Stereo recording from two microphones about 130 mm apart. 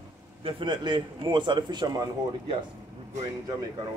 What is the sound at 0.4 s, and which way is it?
A man's voice, 40° right (ahead or behind).